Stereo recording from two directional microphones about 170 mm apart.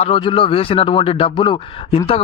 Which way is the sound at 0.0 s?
30° left (ahead or behind).